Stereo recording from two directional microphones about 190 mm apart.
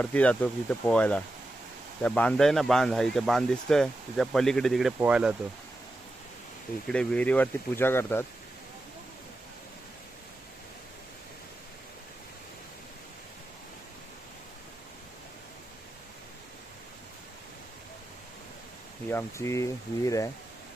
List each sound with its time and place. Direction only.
0.0 s speech: 5° left (ahead or behind)
6.8 s speech: 5° left (ahead or behind)
19.0 s speech: 15° left (ahead or behind)